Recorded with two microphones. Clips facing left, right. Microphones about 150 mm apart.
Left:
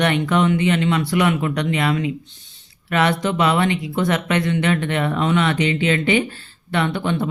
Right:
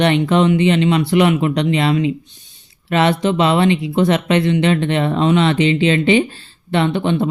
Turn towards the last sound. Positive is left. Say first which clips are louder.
# right 4 dB
turn(degrees=-20)  # may be behind; listen again after turning